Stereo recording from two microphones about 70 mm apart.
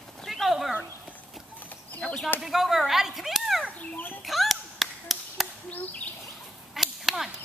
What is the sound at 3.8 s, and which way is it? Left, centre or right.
Speech, left.